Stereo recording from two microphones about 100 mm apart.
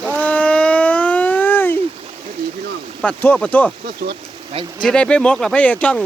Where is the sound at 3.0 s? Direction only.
15° left (ahead or behind).